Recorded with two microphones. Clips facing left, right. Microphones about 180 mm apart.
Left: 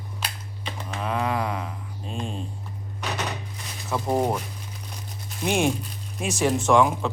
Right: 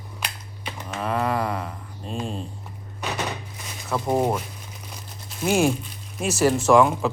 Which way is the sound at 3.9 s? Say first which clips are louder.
Right 1 dB; 5° right (ahead or behind).